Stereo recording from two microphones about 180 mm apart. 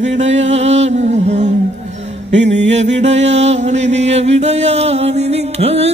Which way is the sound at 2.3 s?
40° right (ahead or behind).